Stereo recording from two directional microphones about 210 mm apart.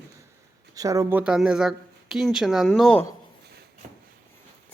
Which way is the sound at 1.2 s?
5° right (ahead or behind).